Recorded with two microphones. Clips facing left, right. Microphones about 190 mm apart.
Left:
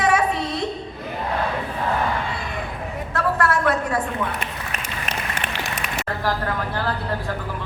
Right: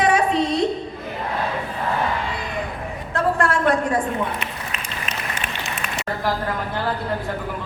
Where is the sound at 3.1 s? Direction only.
25° right (ahead or behind).